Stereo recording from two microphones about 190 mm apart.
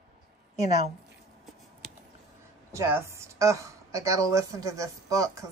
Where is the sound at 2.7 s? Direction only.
15° right (ahead or behind).